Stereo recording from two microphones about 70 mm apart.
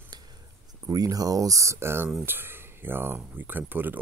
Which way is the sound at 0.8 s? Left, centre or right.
Right.